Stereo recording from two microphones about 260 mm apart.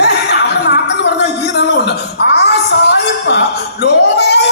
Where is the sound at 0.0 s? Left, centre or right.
Left.